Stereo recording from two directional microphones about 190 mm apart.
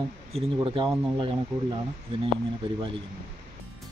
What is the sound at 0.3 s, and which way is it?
Speech, 25° right (ahead or behind).